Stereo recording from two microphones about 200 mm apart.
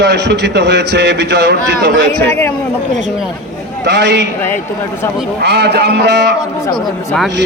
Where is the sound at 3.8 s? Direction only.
60° right (ahead or behind).